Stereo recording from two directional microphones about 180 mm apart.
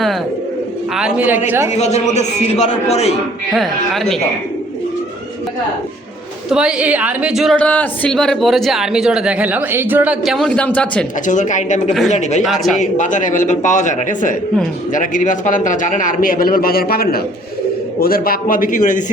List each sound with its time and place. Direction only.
0.9 s a man's voice: 5° right (ahead or behind)
1.7 s a man's voice: 40° left (ahead or behind)
3.5 s a woman's voice: centre (ahead or behind)
6.5 s a woman's voice: 5° right (ahead or behind)
11.3 s a man's voice: 45° left (ahead or behind)